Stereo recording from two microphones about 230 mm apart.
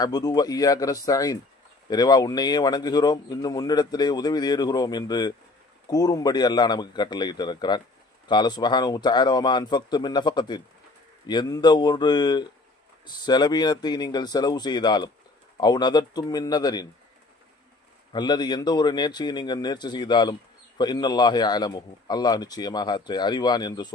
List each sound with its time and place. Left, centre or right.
0.0 s a man's voice: centre
18.1 s a man's voice: centre